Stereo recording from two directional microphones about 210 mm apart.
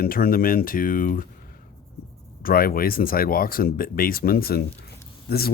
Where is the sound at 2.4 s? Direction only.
45° left (ahead or behind).